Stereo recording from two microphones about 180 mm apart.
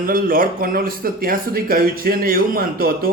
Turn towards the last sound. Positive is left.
turn(degrees=-55)  # may be behind; listen again after turning